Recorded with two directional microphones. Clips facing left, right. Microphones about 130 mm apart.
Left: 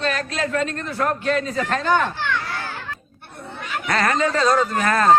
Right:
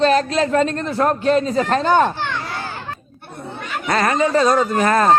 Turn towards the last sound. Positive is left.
turn(degrees=-25)  # may be behind; listen again after turning